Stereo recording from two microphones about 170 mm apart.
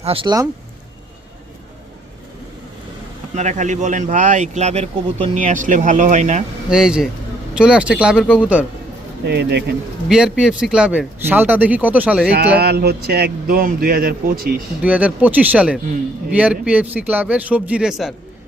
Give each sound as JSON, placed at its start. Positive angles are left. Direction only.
{"t": 0.0, "sound": "speech", "side_deg": -30}
{"t": 3.3, "sound": "a man's voice", "side_deg": -45}
{"t": 6.7, "sound": "speech", "side_deg": -5}
{"t": 9.2, "sound": "a man's voice", "side_deg": -80}
{"t": 10.1, "sound": "speech", "side_deg": -5}
{"t": 12.5, "sound": "speech", "side_deg": -70}
{"t": 14.8, "sound": "speech", "side_deg": -10}